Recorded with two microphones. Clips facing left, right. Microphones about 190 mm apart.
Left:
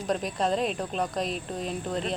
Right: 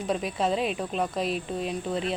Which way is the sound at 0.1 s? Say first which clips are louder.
Even; 5° right (ahead or behind).